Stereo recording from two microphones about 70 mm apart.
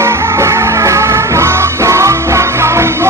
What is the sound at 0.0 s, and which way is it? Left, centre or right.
Music, right.